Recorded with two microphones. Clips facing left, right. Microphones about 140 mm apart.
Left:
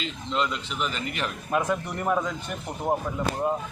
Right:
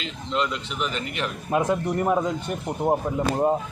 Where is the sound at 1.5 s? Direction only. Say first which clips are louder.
Right 4 dB; 20° right (ahead or behind).